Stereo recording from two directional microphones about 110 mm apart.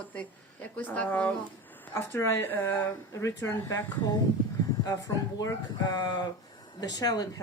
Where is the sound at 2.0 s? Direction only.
25° left (ahead or behind).